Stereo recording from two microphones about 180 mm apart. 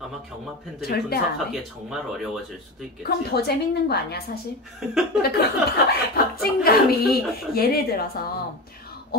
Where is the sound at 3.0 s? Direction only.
65° left (ahead or behind).